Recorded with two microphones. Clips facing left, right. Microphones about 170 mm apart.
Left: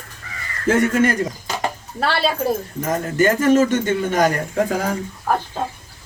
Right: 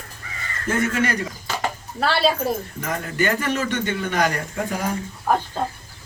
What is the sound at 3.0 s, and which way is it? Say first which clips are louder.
A man's voice: left 7 dB; 45° left (ahead or behind).